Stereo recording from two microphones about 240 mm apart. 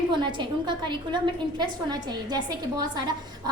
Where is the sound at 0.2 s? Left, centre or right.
Centre.